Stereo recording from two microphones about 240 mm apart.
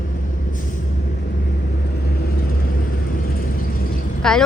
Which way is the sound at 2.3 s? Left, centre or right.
Left.